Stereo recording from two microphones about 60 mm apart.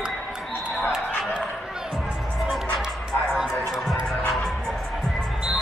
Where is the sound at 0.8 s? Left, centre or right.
Centre.